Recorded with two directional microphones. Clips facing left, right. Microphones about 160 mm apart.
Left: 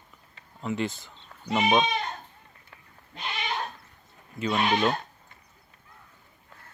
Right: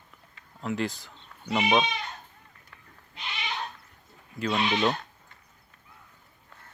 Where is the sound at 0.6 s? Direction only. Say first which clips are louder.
Even; centre (ahead or behind).